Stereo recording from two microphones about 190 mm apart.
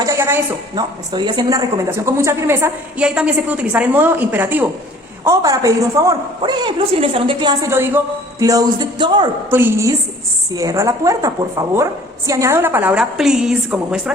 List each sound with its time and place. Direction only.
0.0 s a sound: 15° right (ahead or behind)
0.8 s a woman's voice: 25° right (ahead or behind)
9.5 s speech: 10° right (ahead or behind)